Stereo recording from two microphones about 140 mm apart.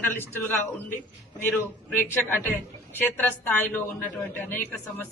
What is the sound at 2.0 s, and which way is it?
A woman's voice, 15° left (ahead or behind).